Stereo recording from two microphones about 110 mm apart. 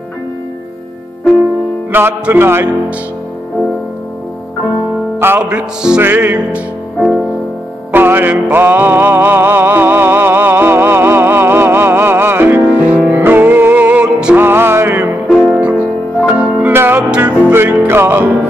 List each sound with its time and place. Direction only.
1.9 s music: 20° right (ahead or behind)
5.4 s music: 10° right (ahead or behind)
7.9 s music: 20° right (ahead or behind)
14.4 s music: 20° right (ahead or behind)
15.2 s music: 10° right (ahead or behind)